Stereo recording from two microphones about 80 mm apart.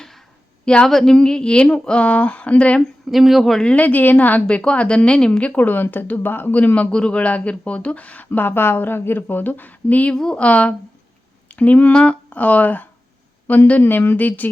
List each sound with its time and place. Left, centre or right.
0.6 s speech: centre
3.1 s a woman's voice: centre; by 14.5 s left